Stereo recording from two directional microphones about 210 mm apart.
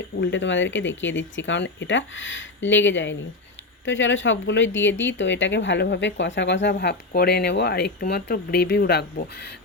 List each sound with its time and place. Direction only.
0.2 s speech: 60° left (ahead or behind)